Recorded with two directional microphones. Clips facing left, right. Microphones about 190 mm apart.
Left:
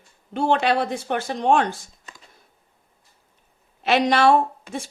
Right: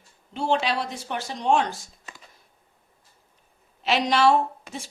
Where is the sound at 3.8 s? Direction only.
55° left (ahead or behind).